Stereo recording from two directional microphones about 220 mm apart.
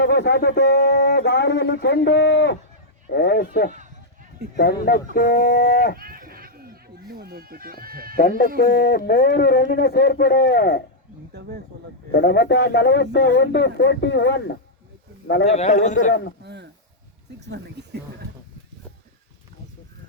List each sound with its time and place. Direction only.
0.0 s speech: 50° left (ahead or behind)
6.0 s a sound: 40° right (ahead or behind)
8.1 s speech: 40° left (ahead or behind)
11.3 s speech: 45° right (ahead or behind)
12.1 s speech: 50° left (ahead or behind)
15.4 s speech: 30° left (ahead or behind)
16.4 s speech: 50° right (ahead or behind)